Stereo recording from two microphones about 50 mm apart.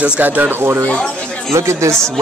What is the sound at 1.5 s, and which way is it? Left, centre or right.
Speech, right.